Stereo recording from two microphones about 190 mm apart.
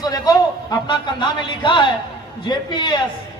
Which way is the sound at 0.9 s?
25° left (ahead or behind).